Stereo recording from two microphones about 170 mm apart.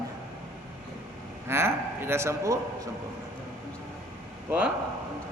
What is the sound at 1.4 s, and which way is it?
A man's voice, 15° right (ahead or behind).